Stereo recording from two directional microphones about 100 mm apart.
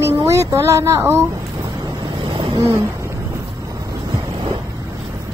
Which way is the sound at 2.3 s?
50° right (ahead or behind).